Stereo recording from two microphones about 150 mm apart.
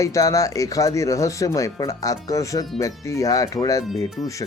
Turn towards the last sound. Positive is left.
turn(degrees=25)  # may be behind; listen again after turning